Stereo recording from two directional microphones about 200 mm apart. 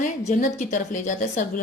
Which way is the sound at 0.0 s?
40° left (ahead or behind).